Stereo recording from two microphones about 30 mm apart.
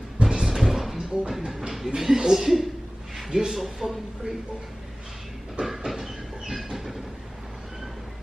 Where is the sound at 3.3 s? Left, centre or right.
Right.